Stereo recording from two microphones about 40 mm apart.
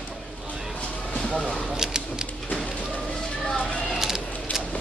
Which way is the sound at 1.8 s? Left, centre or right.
Centre.